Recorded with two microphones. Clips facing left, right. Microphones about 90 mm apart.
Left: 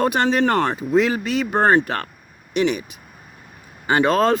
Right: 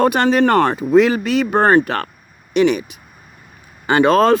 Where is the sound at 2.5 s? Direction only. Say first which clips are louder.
Right 5 dB; 70° right (ahead or behind).